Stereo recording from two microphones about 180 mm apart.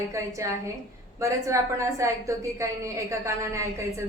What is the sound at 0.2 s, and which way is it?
A woman's voice, 15° right (ahead or behind).